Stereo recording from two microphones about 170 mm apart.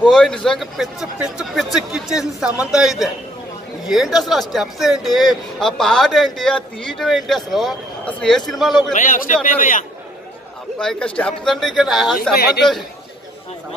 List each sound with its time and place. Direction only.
0.1 s a man's voice: 5° left (ahead or behind)
8.9 s a man's voice: 50° left (ahead or behind)
10.8 s a man's voice: 5° left (ahead or behind)